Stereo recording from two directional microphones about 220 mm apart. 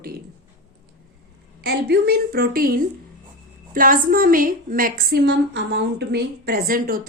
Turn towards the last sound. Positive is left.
turn(degrees=-40)  # may be behind; listen again after turning